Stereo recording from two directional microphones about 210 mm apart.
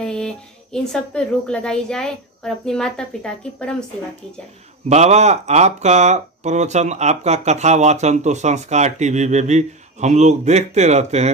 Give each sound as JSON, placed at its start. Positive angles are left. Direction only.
{"t": 0.0, "sound": "speech", "side_deg": 5}
{"t": 4.8, "sound": "speech", "side_deg": -30}